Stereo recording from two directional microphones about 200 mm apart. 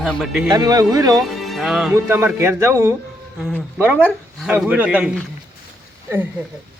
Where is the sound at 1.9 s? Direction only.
15° right (ahead or behind).